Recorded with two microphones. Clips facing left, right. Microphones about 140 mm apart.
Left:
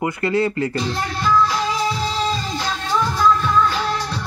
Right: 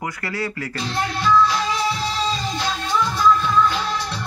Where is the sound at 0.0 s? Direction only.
25° left (ahead or behind).